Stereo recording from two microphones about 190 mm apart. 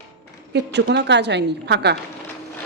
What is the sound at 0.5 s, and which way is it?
A woman's voice, 65° right (ahead or behind).